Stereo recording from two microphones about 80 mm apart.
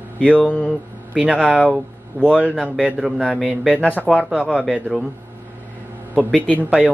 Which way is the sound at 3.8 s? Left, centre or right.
Centre.